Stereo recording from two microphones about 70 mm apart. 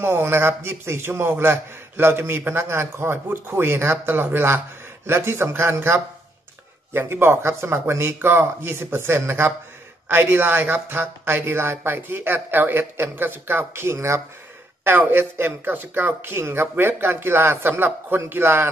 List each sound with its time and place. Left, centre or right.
0.0 s a man's voice: right
14.9 s a man's voice: right